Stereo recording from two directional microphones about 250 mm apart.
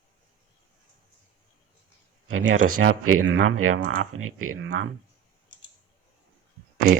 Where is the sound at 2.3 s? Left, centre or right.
Right.